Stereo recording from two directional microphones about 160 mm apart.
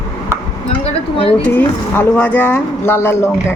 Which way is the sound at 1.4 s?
15° left (ahead or behind).